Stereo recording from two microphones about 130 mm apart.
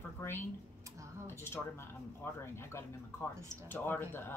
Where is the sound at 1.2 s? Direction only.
20° left (ahead or behind).